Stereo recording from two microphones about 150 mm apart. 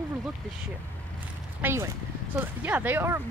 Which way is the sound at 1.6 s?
15° right (ahead or behind).